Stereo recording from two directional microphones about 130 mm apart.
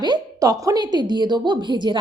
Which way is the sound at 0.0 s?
30° right (ahead or behind).